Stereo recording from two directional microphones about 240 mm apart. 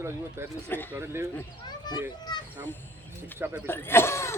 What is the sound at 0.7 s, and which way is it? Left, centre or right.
Cough, centre.